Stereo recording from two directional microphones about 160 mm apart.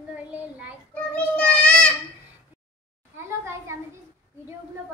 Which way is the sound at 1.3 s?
5° left (ahead or behind).